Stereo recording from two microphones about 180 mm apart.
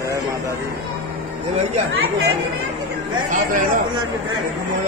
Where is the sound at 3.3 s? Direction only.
45° right (ahead or behind).